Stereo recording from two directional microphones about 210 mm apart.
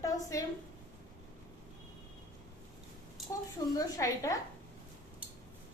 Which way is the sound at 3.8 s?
15° left (ahead or behind).